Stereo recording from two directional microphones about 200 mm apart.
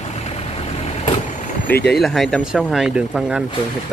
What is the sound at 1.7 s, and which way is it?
Speech, 50° left (ahead or behind).